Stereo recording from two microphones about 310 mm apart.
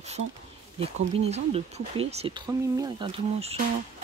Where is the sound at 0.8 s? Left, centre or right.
Centre.